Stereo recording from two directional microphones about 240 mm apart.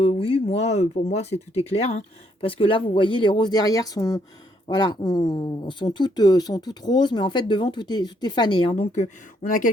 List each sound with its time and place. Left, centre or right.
0.0 s speech: left